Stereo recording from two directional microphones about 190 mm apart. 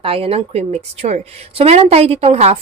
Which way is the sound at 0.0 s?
30° right (ahead or behind).